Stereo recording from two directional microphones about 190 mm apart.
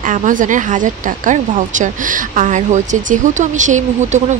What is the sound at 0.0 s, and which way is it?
Speech, 40° right (ahead or behind).